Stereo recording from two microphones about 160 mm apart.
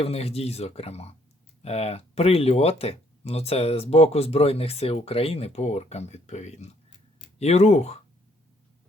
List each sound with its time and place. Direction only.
0.0 s speech: 40° left (ahead or behind)